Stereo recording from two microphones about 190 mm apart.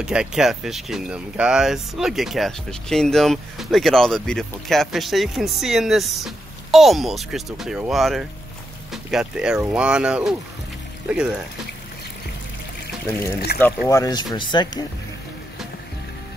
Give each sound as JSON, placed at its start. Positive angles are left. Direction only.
{"t": 0.0, "sound": "speech", "side_deg": -5}
{"t": 13.5, "sound": "speech", "side_deg": 55}
{"t": 13.8, "sound": "speech", "side_deg": 20}